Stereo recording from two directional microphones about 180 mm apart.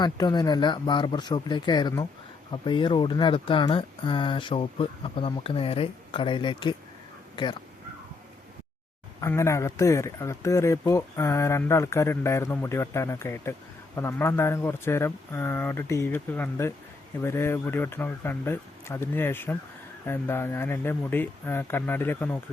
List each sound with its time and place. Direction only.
0.0 s speech: 25° left (ahead or behind)
9.2 s speech: 15° left (ahead or behind)